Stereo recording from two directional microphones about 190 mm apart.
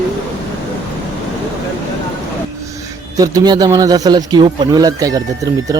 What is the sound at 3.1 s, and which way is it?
A man's voice, 20° right (ahead or behind).